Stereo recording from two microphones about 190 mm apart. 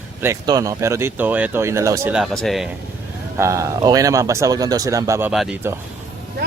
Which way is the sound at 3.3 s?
15° right (ahead or behind).